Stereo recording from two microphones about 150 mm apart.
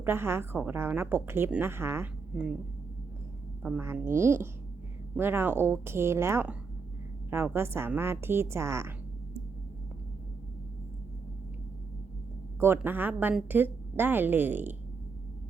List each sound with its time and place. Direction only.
0.0 s a woman's voice: 15° right (ahead or behind)
2.3 s speech: 5° right (ahead or behind)
3.8 s a woman's voice: 15° right (ahead or behind)
12.5 s a woman's voice: 15° right (ahead or behind)